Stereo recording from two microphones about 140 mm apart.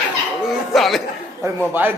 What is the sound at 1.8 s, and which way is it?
Speech, 15° right (ahead or behind).